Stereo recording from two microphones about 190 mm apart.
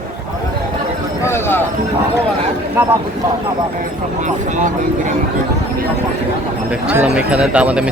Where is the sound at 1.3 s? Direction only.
10° left (ahead or behind).